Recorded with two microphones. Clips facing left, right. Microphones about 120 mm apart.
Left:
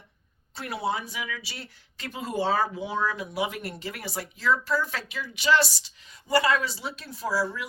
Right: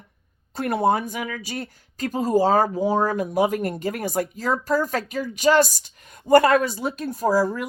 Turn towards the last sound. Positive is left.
turn(degrees=-45)  # may be behind; listen again after turning